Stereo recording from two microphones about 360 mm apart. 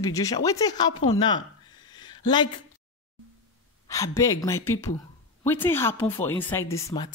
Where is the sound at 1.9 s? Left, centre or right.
Centre.